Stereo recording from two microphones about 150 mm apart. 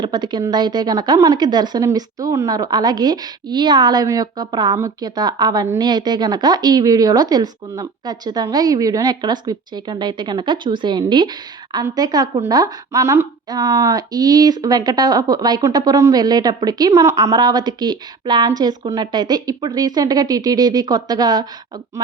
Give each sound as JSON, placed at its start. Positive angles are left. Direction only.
{"t": 0.0, "sound": "speech", "side_deg": -30}